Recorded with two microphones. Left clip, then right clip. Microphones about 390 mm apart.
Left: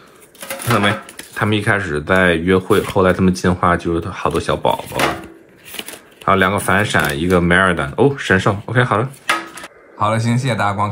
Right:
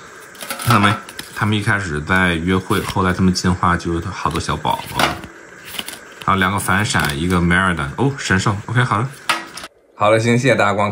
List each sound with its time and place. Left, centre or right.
0.7 s speech: centre
5.8 s speech: centre